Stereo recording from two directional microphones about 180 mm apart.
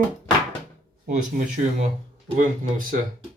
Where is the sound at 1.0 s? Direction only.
45° right (ahead or behind).